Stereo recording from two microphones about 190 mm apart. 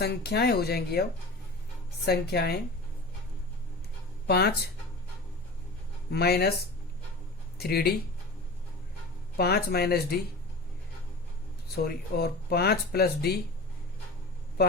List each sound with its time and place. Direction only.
0.0 s speech: 60° left (ahead or behind)
2.0 s speech: 60° left (ahead or behind)
4.3 s speech: 55° left (ahead or behind)
6.1 s speech: 55° left (ahead or behind)
7.6 s speech: 55° left (ahead or behind)
9.4 s speech: 55° left (ahead or behind)
11.7 s speech: 55° left (ahead or behind)